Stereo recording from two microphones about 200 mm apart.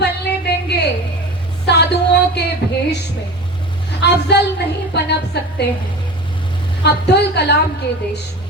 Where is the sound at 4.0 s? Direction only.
55° left (ahead or behind).